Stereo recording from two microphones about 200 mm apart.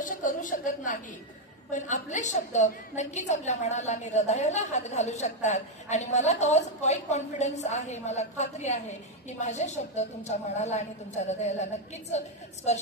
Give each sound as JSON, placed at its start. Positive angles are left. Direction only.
{"t": 0.0, "sound": "a woman's voice", "side_deg": 40}